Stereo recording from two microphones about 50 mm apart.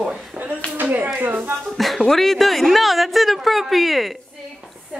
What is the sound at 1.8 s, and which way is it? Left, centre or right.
Speech, centre.